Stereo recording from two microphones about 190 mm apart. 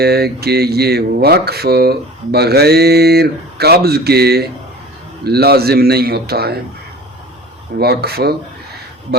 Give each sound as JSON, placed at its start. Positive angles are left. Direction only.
{"t": 0.0, "sound": "speech", "side_deg": -55}
{"t": 7.8, "sound": "speech", "side_deg": -55}